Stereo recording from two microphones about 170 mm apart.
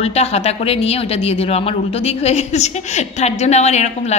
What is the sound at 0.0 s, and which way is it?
Speech, 40° left (ahead or behind).